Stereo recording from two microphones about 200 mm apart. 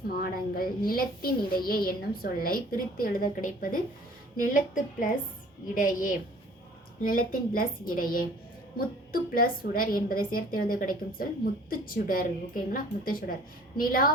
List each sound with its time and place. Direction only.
0.1 s a woman's voice: 50° left (ahead or behind)